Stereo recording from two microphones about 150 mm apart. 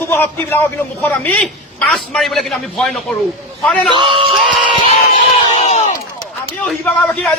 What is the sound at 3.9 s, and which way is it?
Speech, 35° right (ahead or behind).